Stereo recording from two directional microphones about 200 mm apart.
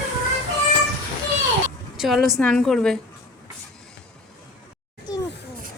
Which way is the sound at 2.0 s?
Centre (ahead or behind).